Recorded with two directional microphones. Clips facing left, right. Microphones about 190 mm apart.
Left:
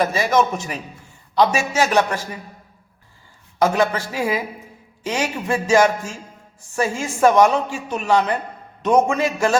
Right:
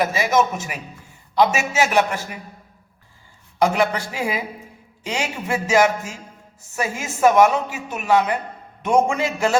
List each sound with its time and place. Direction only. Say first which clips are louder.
0.0 s a man's voice: left 1 dB; 10° right (ahead or behind)
3.6 s a man's voice: left 1 dB; 15° right (ahead or behind)